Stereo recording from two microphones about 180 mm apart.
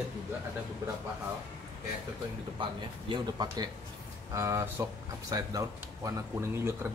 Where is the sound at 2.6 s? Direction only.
30° right (ahead or behind).